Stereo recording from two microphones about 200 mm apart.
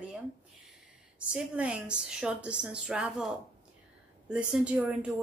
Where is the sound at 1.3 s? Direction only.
5° right (ahead or behind).